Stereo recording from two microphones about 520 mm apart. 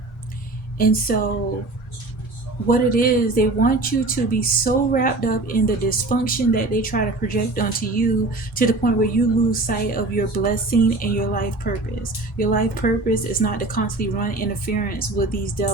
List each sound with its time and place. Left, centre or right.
0.8 s speech: centre
2.6 s speech: centre